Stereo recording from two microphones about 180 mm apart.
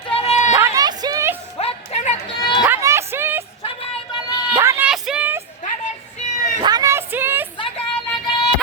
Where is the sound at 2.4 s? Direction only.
25° left (ahead or behind).